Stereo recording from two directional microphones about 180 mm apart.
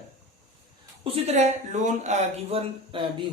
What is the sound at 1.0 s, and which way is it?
Speech, 35° right (ahead or behind).